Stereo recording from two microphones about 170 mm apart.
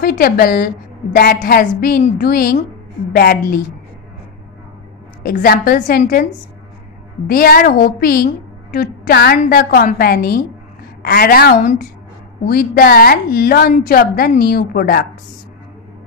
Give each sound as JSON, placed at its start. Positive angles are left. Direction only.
{"t": 0.0, "sound": "a woman's voice", "side_deg": 60}
{"t": 5.2, "sound": "a woman's voice", "side_deg": 60}
{"t": 7.2, "sound": "a woman's voice", "side_deg": 60}